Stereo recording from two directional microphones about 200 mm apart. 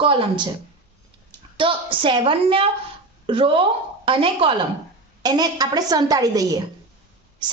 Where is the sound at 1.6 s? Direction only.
25° right (ahead or behind).